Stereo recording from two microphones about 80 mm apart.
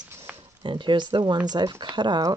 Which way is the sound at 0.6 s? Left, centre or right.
Right.